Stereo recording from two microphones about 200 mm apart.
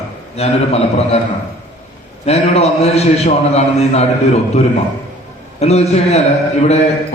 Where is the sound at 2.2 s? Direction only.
30° left (ahead or behind).